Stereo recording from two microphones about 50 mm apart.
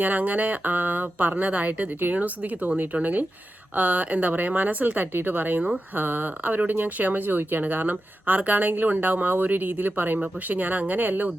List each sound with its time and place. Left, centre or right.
0.0 s speech: right